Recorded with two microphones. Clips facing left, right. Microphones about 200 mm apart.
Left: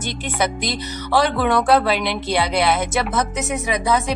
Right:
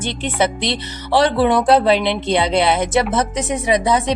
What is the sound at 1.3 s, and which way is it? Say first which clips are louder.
Speech: right 3 dB; 30° right (ahead or behind).